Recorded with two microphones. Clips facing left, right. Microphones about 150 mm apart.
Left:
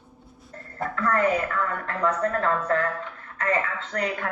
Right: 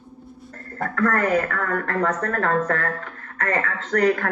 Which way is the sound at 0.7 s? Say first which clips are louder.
Right 3 dB; 50° right (ahead or behind).